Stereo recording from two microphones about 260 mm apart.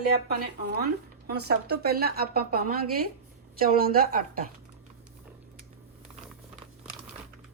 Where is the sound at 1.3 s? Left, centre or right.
Right.